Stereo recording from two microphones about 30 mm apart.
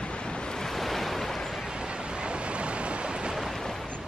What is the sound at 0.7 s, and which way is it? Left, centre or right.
Waves, centre.